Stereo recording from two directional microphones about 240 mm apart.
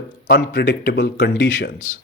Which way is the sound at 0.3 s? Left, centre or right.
Left.